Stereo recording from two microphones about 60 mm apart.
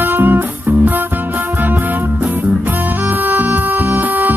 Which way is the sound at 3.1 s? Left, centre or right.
Right.